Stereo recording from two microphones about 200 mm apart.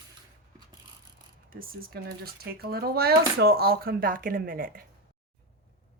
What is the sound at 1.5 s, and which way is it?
Speech, 45° right (ahead or behind).